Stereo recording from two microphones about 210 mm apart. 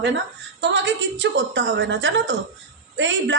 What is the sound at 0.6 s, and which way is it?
A man's voice, 55° right (ahead or behind).